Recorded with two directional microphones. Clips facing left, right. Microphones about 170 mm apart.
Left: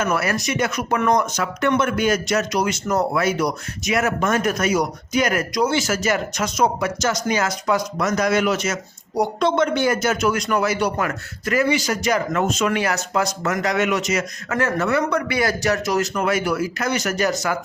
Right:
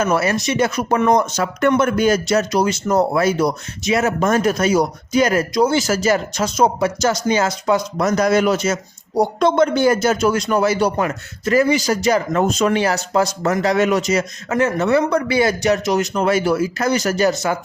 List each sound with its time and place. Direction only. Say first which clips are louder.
0.0 s speech: right 4 dB; 25° right (ahead or behind)
1.6 s speech: right 4 dB; 40° right (ahead or behind)
11.6 s speech: right 4 dB; 40° right (ahead or behind)
14.5 s speech: right 4 dB; 20° right (ahead or behind)